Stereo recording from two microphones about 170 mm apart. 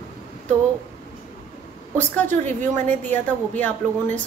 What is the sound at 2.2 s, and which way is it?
Speech, 45° right (ahead or behind).